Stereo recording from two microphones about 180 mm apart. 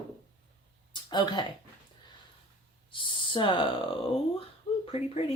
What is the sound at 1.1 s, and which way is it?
Speech, 25° left (ahead or behind).